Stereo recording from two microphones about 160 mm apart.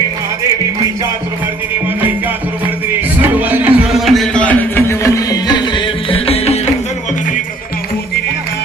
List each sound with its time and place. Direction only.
3.2 s music: 10° right (ahead or behind); by 5.8 s 20° left (ahead or behind)
6.1 s music: 35° left (ahead or behind)